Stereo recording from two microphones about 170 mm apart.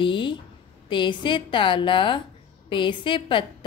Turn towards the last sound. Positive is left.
turn(degrees=30)  # may be behind; listen again after turning